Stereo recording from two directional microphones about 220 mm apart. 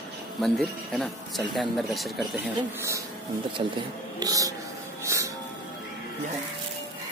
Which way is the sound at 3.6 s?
25° right (ahead or behind).